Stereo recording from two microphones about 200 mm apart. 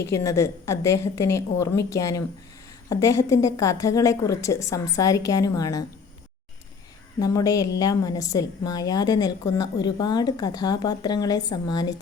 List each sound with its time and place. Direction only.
0.0 s a woman's voice: 15° left (ahead or behind)
7.2 s a woman's voice: 15° left (ahead or behind)